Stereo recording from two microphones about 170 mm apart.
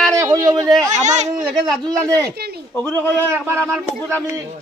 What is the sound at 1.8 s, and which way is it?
Speech, 25° right (ahead or behind).